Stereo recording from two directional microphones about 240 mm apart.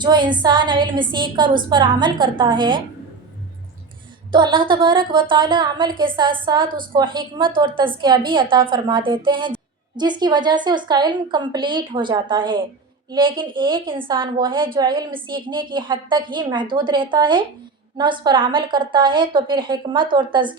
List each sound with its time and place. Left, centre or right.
0.0 s a woman's voice: centre
4.3 s a woman's voice: centre